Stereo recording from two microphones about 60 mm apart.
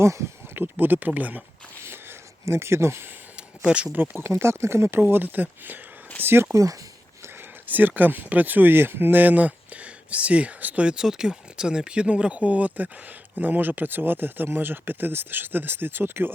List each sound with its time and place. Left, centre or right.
0.0 s speech: right
0.5 s speech: right
2.4 s speech: right
3.6 s speech: centre
3.9 s speech: right
4.2 s speech: right
4.9 s speech: right
6.2 s speech: right
7.7 s speech: right
10.8 s speech: centre; by 16.3 s right